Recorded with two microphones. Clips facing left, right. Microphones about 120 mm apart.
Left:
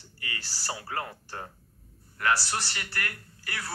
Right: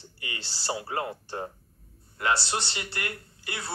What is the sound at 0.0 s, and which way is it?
Speech, 25° right (ahead or behind).